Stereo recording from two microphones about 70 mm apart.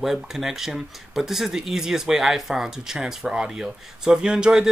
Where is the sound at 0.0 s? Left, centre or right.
Centre.